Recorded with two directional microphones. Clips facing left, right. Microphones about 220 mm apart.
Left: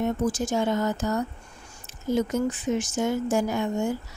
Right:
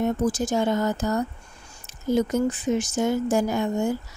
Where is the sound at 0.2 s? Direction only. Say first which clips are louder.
Right 2 dB; 35° right (ahead or behind).